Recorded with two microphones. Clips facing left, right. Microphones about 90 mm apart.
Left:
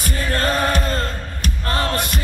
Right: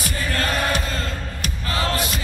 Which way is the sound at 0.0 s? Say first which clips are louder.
Left 3 dB; 40° left (ahead or behind).